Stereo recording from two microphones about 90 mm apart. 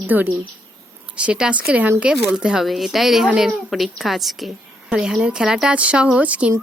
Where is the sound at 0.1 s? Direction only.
20° right (ahead or behind).